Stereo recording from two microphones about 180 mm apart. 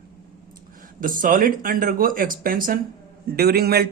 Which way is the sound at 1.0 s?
50° right (ahead or behind).